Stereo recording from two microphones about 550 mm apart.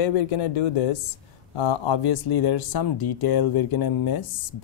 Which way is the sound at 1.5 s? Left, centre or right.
Left.